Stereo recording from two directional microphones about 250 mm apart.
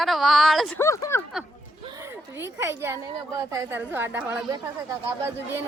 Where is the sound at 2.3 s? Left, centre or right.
Centre.